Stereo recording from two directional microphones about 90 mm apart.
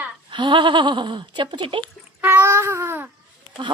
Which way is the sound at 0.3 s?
65° right (ahead or behind).